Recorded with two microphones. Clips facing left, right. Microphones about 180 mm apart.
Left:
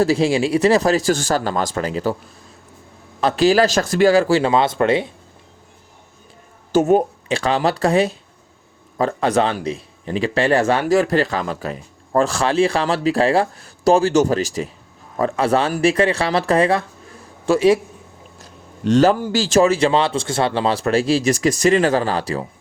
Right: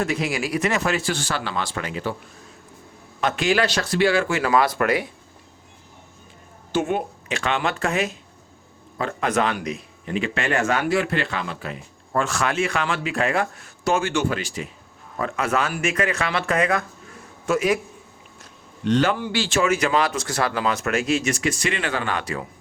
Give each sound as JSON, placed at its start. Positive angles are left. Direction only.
{"t": 0.0, "sound": "speech", "side_deg": 30}
{"t": 3.2, "sound": "speech", "side_deg": 35}
{"t": 6.7, "sound": "a man's voice", "side_deg": 40}
{"t": 18.9, "sound": "speech", "side_deg": 40}